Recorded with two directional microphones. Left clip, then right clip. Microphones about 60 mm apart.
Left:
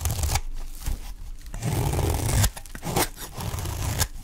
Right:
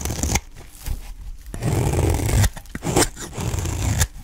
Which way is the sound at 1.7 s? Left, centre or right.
Centre.